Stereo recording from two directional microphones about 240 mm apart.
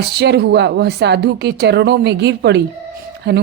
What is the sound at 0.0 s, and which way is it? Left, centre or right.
Speech, right.